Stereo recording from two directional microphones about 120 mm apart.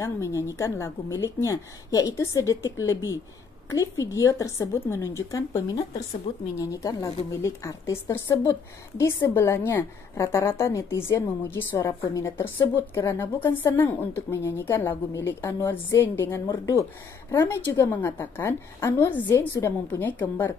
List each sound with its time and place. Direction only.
0.0 s a woman's voice: 25° left (ahead or behind)
6.3 s speech: 55° left (ahead or behind)
6.6 s a woman's voice: 30° left (ahead or behind)